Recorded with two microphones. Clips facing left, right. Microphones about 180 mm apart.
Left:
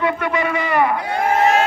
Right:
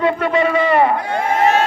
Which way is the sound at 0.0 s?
30° right (ahead or behind).